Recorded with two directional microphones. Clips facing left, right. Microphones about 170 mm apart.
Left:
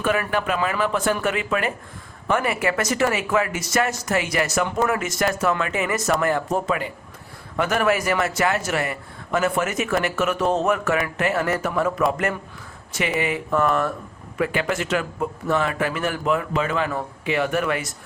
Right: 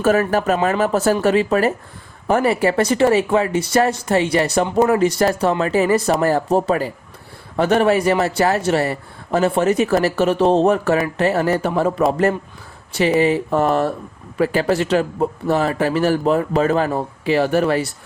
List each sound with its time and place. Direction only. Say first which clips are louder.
0.0 s speech: right 6 dB; 40° right (ahead or behind)